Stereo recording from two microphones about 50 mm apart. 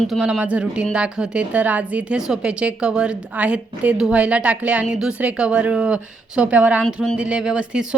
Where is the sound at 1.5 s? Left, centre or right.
Right.